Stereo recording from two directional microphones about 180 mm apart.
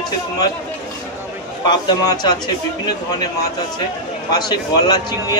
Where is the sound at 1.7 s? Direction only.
25° left (ahead or behind).